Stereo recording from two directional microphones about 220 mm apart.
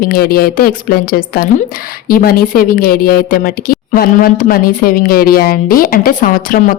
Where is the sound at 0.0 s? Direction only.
40° left (ahead or behind).